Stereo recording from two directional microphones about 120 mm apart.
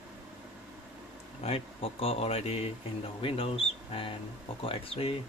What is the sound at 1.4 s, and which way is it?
Speech, 55° left (ahead or behind).